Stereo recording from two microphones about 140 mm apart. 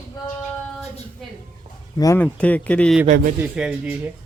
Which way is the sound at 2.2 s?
10° left (ahead or behind).